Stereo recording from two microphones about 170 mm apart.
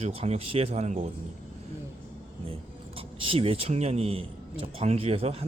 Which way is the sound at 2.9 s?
35° right (ahead or behind).